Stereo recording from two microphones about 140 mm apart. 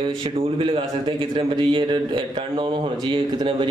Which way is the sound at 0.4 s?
40° right (ahead or behind).